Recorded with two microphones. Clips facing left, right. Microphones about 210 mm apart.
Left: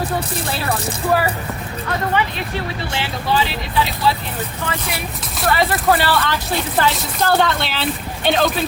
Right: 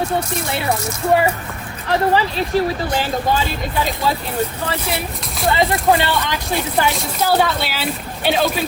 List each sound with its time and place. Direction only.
1.9 s speech: 35° right (ahead or behind)
4.7 s speech: 30° right (ahead or behind)
5.5 s speech: 15° right (ahead or behind)
6.9 s speech: centre (ahead or behind)